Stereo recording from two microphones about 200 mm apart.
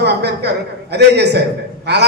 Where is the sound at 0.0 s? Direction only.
55° right (ahead or behind).